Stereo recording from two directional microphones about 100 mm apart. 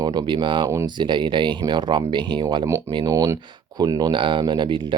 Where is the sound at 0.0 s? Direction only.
45° right (ahead or behind).